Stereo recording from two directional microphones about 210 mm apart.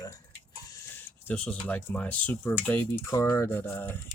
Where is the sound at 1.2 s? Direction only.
5° left (ahead or behind).